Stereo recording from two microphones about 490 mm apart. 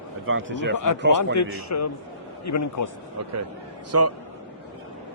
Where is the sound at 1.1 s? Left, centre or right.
Left.